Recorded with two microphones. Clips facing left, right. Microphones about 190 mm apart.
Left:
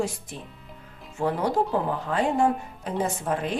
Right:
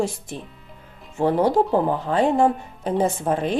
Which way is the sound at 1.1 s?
25° right (ahead or behind).